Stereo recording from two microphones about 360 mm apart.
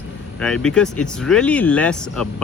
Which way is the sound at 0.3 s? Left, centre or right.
Centre.